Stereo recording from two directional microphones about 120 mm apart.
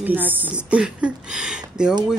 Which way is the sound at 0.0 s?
15° right (ahead or behind).